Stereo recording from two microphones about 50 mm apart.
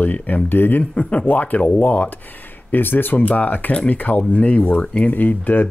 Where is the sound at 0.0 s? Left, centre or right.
Left.